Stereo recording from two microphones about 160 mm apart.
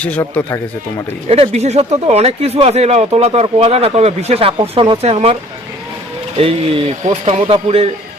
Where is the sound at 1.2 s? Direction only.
40° right (ahead or behind).